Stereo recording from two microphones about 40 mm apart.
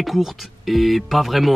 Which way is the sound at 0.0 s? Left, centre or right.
Centre.